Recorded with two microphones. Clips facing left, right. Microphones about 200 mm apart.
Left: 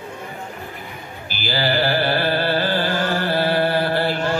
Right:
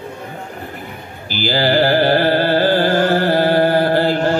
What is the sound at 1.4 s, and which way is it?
Carnatic music, 45° right (ahead or behind).